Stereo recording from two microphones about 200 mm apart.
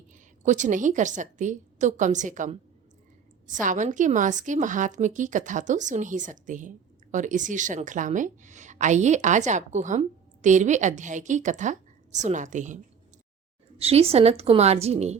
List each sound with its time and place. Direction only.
0.1 s a woman's voice: 35° right (ahead or behind)